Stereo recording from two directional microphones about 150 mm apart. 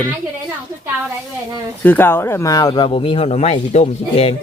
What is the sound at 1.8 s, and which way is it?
Speech, 15° left (ahead or behind).